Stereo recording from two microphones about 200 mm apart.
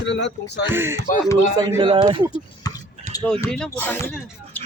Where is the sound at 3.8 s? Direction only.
10° left (ahead or behind).